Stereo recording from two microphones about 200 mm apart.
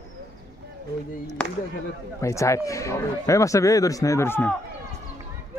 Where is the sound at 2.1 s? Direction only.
15° left (ahead or behind).